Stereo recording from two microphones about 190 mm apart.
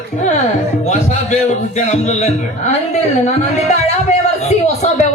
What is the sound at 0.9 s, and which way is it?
A man's voice, 35° left (ahead or behind).